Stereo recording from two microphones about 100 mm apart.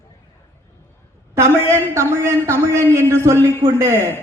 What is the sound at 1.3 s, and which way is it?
A man's voice, 25° right (ahead or behind).